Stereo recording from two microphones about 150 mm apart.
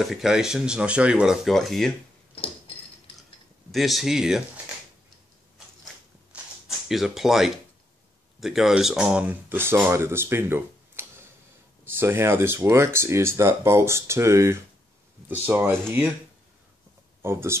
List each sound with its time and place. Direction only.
0.0 s speech: centre (ahead or behind)
2.3 s a sound: 40° left (ahead or behind)
3.7 s speech: centre (ahead or behind)
6.9 s speech: centre (ahead or behind)
17.2 s speech: 15° right (ahead or behind)